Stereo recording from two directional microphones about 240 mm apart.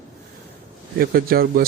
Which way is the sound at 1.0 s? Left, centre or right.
Right.